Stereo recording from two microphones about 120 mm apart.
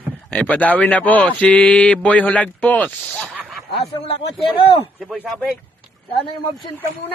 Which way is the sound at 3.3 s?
5° right (ahead or behind).